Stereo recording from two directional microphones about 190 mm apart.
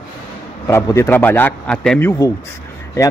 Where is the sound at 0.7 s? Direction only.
15° left (ahead or behind).